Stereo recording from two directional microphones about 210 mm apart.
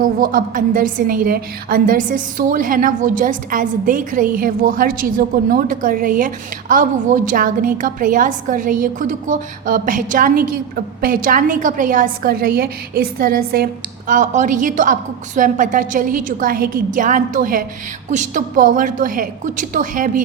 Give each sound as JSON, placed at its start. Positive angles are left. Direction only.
{"t": 0.0, "sound": "a woman's voice", "side_deg": -40}